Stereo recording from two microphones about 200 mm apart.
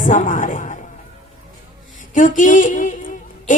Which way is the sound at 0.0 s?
40° left (ahead or behind).